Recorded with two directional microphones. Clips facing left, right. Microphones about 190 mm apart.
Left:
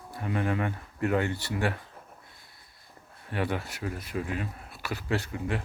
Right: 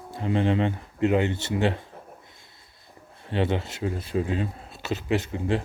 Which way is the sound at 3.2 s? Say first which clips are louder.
Right 5 dB; 25° right (ahead or behind).